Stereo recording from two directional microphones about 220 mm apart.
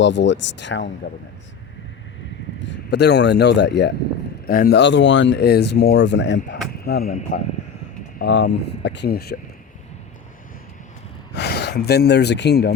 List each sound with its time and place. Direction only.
0.0 s speech: 55° left (ahead or behind)
2.6 s speech: 55° left (ahead or behind)
7.0 s speech: 40° left (ahead or behind)
8.2 s speech: 55° left (ahead or behind)
11.3 s speech: 50° left (ahead or behind)